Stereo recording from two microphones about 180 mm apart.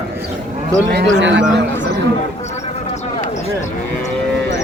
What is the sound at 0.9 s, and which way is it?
Speech, 75° right (ahead or behind).